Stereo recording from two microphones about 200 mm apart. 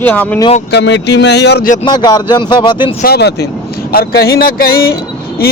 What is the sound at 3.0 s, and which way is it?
Speech, 55° left (ahead or behind).